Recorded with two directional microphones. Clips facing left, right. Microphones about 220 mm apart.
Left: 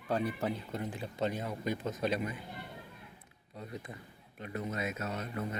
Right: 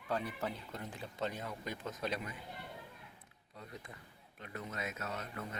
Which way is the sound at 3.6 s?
20° left (ahead or behind).